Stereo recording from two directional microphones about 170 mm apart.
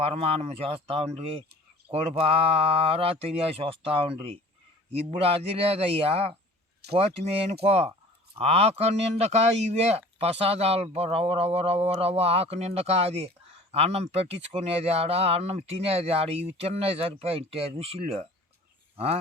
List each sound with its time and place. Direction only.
0.0 s speech: 35° right (ahead or behind)
6.8 s speech: 70° right (ahead or behind)
7.6 s speech: 35° right (ahead or behind)